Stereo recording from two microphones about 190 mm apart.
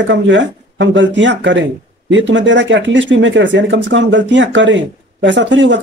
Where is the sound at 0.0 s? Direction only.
75° right (ahead or behind).